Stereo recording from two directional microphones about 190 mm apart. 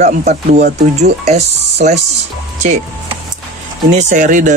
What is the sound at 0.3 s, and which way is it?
Speech, 40° right (ahead or behind).